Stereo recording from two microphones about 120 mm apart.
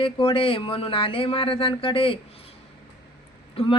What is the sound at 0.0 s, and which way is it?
Speech, 50° left (ahead or behind).